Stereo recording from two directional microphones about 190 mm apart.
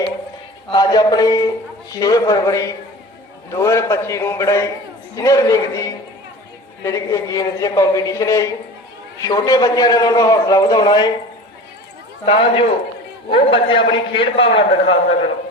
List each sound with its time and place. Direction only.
0.7 s a man's voice: 20° left (ahead or behind)
6.8 s a man's voice: 15° left (ahead or behind)
12.2 s a man's voice: 25° left (ahead or behind)